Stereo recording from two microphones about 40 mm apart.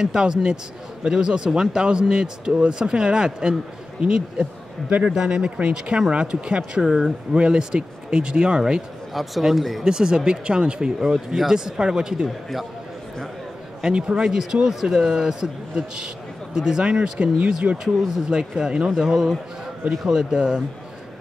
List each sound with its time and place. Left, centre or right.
0.0 s speech: centre
9.1 s speech: centre
9.8 s a man's voice: centre
13.9 s speech: right
14.2 s a man's voice: centre
18.9 s a man's voice: centre